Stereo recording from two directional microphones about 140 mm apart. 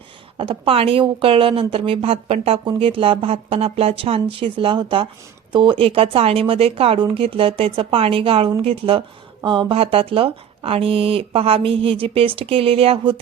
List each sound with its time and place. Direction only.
0.3 s speech: 40° right (ahead or behind)